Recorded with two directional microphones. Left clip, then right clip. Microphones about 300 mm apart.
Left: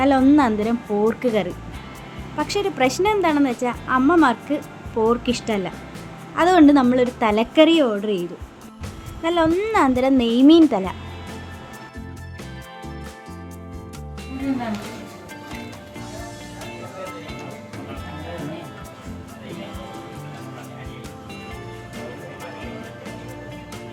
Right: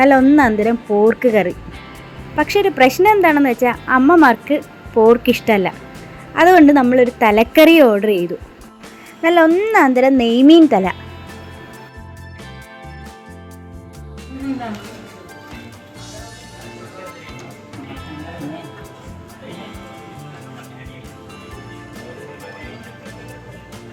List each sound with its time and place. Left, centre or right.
0.3 s speech: centre